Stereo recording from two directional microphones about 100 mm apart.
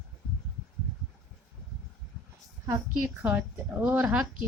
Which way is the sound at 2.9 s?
15° right (ahead or behind).